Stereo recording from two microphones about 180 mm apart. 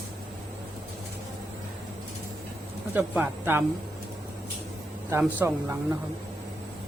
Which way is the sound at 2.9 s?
10° right (ahead or behind).